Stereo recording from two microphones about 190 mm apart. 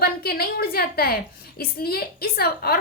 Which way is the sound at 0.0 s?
55° left (ahead or behind).